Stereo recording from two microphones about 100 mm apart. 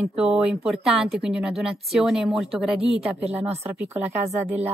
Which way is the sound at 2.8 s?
85° right.